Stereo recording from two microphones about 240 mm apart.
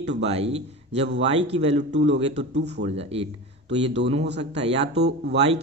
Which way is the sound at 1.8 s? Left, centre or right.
Right.